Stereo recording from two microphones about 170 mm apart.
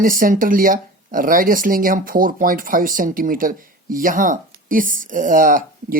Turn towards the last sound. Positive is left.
turn(degrees=-50)  # may be behind; listen again after turning